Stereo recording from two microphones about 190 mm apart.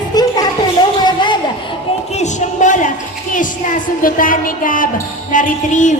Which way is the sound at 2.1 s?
40° left (ahead or behind).